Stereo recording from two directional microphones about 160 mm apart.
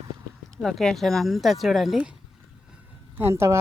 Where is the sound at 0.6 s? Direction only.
Centre (ahead or behind).